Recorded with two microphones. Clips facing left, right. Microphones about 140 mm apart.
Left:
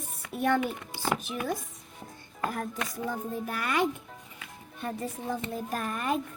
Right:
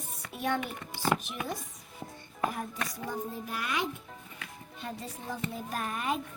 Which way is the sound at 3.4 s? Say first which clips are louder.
Left 8 dB; 55° left (ahead or behind).